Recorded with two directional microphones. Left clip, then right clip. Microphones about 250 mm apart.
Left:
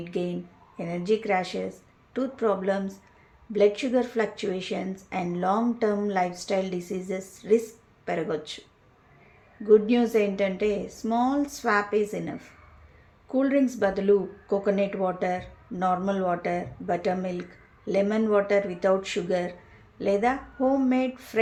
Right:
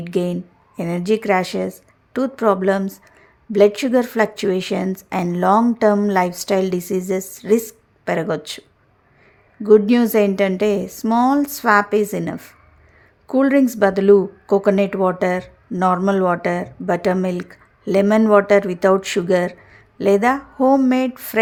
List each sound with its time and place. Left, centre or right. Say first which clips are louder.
0.0 s speech: right 9 dB; right
9.6 s speech: right 7 dB; right